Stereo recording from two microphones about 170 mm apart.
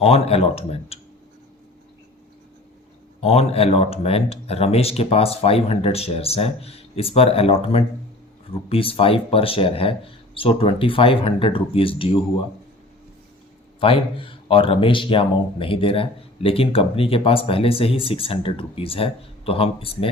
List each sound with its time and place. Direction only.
0.0 s a man's voice: 35° left (ahead or behind)
3.2 s a man's voice: 35° left (ahead or behind)
13.7 s a man's voice: 30° left (ahead or behind)